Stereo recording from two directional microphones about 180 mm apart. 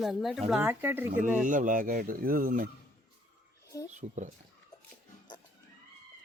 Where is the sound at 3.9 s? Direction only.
45° right (ahead or behind).